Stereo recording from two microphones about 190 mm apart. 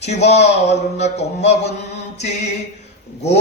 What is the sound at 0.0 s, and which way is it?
Speech, 35° left (ahead or behind).